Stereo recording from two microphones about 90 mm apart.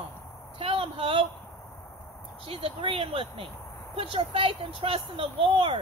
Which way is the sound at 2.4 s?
90° right.